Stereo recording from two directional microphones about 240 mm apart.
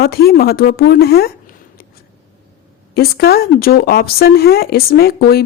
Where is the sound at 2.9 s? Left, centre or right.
Left.